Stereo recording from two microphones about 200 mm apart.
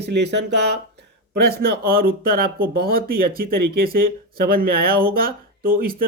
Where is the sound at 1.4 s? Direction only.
50° right (ahead or behind).